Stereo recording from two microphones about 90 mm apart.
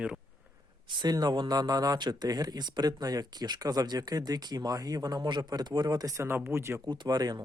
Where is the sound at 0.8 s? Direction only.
60° right (ahead or behind).